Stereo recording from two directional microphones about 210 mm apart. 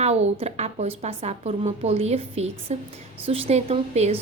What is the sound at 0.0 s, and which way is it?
A woman's voice, 30° right (ahead or behind).